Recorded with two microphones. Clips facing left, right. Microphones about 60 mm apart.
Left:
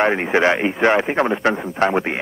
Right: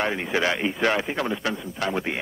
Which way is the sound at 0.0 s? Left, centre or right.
Left.